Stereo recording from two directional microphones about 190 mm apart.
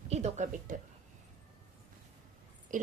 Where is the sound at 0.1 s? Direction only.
40° right (ahead or behind).